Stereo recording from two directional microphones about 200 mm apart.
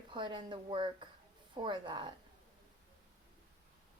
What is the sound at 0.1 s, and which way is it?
Speech, 25° right (ahead or behind).